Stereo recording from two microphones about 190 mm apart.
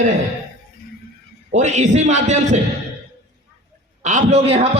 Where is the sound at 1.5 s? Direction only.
40° right (ahead or behind).